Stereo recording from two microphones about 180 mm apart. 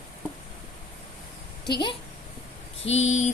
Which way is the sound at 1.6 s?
25° left (ahead or behind).